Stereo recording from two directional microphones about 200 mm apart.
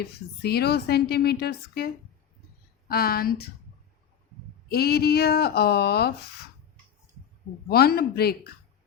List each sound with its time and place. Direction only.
0.0 s a woman's voice: 50° left (ahead or behind)
2.9 s a woman's voice: 50° left (ahead or behind)
4.7 s a woman's voice: 50° left (ahead or behind)
7.7 s a woman's voice: 50° left (ahead or behind)